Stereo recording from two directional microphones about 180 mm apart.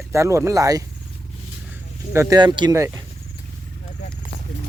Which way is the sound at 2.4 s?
25° right (ahead or behind).